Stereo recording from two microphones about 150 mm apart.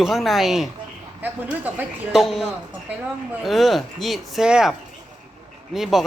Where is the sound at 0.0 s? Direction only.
Centre (ahead or behind).